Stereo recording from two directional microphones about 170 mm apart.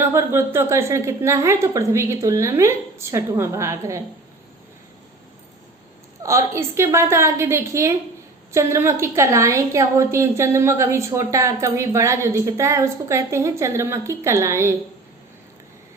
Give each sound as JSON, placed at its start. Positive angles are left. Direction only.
{"t": 0.0, "sound": "a woman's voice", "side_deg": -15}
{"t": 6.2, "sound": "a woman's voice", "side_deg": -15}